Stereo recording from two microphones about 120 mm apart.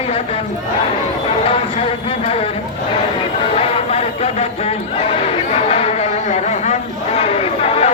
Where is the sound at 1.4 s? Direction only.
55° left (ahead or behind).